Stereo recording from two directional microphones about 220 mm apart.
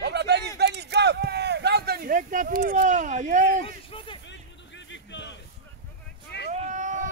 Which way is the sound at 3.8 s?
25° left (ahead or behind).